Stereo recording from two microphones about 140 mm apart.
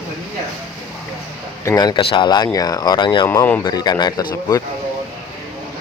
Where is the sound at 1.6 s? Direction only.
30° left (ahead or behind).